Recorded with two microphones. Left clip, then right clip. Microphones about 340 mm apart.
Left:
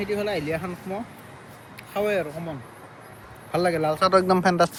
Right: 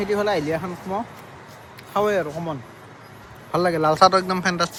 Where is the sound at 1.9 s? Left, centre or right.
Centre.